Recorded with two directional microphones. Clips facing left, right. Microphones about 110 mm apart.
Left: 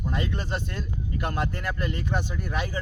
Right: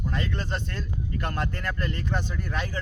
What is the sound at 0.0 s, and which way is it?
Speech, 15° left (ahead or behind).